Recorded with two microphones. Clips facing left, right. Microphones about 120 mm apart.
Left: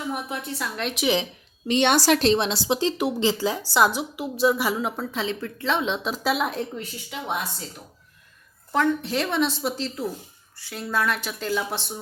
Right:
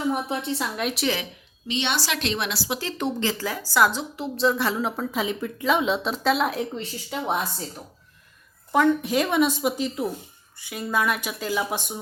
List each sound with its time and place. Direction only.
0.1 s a woman's voice: 25° right (ahead or behind)
0.8 s a woman's voice: 5° right (ahead or behind)
1.0 s speech: 20° left (ahead or behind)
1.6 s a woman's voice: 50° left (ahead or behind); by 5.0 s 5° left (ahead or behind)
5.1 s a woman's voice: 15° right (ahead or behind)
8.7 s a woman's voice: 10° right (ahead or behind)